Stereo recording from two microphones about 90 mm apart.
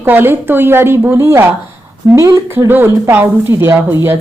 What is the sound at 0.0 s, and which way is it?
Speech, 25° right (ahead or behind).